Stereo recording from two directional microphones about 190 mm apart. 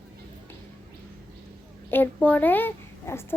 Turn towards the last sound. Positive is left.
turn(degrees=10)  # may be behind; listen again after turning